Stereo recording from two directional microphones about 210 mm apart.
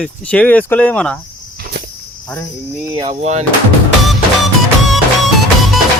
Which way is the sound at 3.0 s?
25° right (ahead or behind).